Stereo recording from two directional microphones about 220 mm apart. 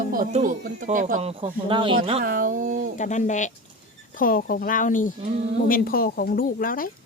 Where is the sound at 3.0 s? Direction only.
35° left (ahead or behind).